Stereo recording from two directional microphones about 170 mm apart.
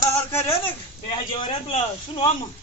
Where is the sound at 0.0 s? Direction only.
15° left (ahead or behind).